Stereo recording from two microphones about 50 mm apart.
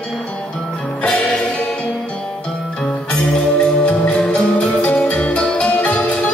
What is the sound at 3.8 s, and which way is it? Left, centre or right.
Music, left.